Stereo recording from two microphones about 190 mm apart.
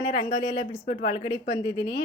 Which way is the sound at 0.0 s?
25° left (ahead or behind).